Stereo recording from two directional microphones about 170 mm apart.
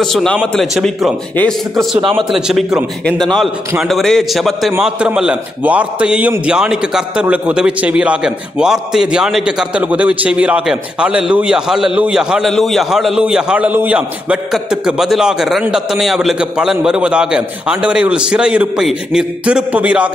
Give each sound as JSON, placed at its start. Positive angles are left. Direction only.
{"t": 0.0, "sound": "a man's voice", "side_deg": 5}
{"t": 2.0, "sound": "a man's voice", "side_deg": -30}
{"t": 2.3, "sound": "a man's voice", "side_deg": -5}